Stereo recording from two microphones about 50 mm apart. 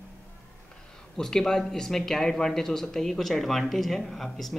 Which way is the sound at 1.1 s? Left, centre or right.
Centre.